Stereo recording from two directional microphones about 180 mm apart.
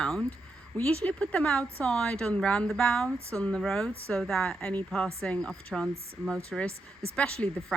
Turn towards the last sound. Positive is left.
turn(degrees=10)  # may be behind; listen again after turning